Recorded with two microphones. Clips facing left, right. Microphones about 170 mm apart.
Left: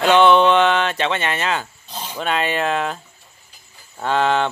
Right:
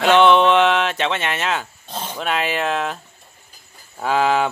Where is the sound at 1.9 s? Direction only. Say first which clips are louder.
Right 3 dB; 50° right (ahead or behind).